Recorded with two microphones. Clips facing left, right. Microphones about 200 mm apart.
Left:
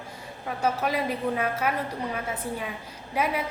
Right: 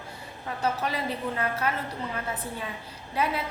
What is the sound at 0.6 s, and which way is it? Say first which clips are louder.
Speech: left 3 dB; 10° left (ahead or behind).